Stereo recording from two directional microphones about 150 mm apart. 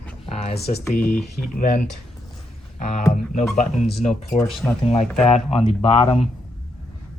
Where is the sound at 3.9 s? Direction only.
Centre (ahead or behind).